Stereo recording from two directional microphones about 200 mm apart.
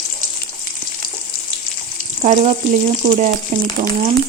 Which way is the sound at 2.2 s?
35° right (ahead or behind).